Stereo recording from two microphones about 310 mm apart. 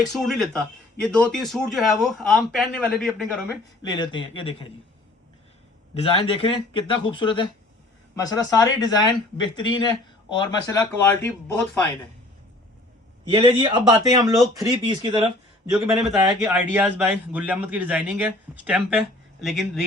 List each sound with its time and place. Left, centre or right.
0.0 s a man's voice: centre
3.8 s speech: centre
5.9 s speech: centre
13.2 s speech: centre
15.7 s a man's voice: centre